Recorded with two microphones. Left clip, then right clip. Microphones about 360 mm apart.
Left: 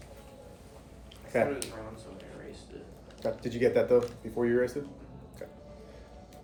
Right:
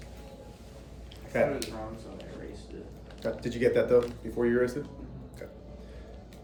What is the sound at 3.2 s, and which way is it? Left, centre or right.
Speech, centre.